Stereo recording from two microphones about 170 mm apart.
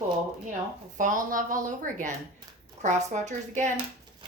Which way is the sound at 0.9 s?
50° right (ahead or behind).